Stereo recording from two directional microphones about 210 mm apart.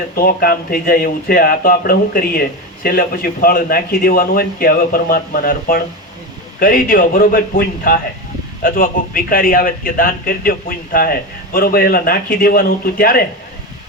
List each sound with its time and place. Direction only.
0.2 s a man's voice: 45° left (ahead or behind)